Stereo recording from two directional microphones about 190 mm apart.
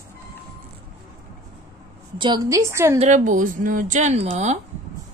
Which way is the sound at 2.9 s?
40° right (ahead or behind).